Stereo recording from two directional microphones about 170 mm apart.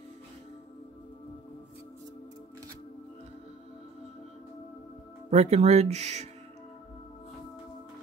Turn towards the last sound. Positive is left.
turn(degrees=-40)  # may be behind; listen again after turning